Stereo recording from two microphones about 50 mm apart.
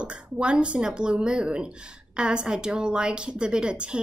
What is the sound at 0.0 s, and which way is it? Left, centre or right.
Speech, right.